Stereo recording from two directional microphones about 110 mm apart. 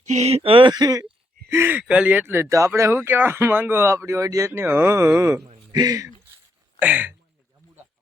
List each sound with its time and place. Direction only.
0.1 s a sound: 75° right (ahead or behind); by 0.7 s 55° right (ahead or behind)
0.7 s speech: 35° right (ahead or behind)
1.5 s speech: 20° right (ahead or behind)
1.8 s speech: 10° right (ahead or behind); by 6.1 s 35° right (ahead or behind)
6.7 s speech: 15° right (ahead or behind)